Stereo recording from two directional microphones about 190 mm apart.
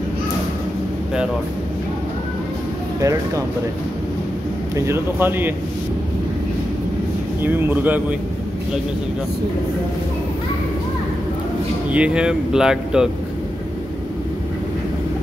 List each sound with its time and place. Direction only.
3.0 s speech: 15° right (ahead or behind)
4.7 s speech: 15° right (ahead or behind)
7.4 s speech: 10° right (ahead or behind)
11.9 s speech: 5° right (ahead or behind)